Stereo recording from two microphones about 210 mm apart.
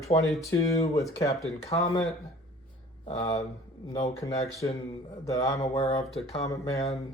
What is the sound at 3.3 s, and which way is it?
Speech, 30° left (ahead or behind).